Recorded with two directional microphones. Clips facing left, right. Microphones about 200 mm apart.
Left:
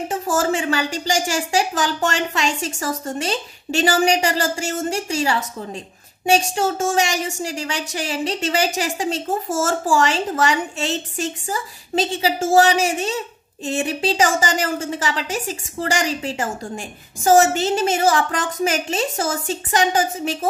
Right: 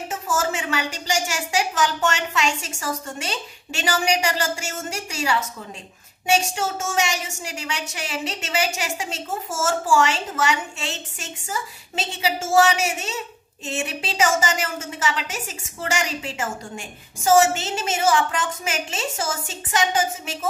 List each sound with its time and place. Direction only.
0.1 s a woman's voice: 35° left (ahead or behind)